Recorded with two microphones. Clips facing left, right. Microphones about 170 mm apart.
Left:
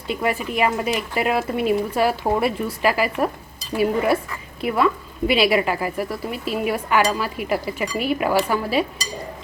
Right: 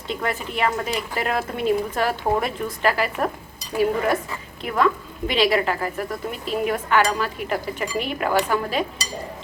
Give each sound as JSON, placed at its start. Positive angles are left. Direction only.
{"t": 0.1, "sound": "speech", "side_deg": 10}